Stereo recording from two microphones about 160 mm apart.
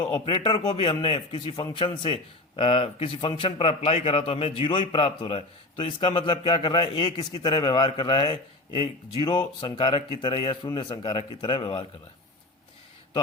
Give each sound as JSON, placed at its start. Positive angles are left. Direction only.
{"t": 0.0, "sound": "a man's voice", "side_deg": 30}